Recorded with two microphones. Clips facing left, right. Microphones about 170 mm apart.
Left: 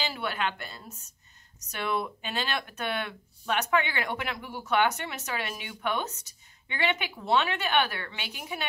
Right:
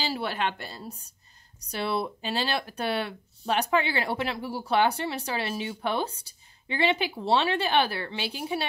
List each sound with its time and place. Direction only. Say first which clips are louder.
0.0 s speech: right 2 dB; 35° right (ahead or behind)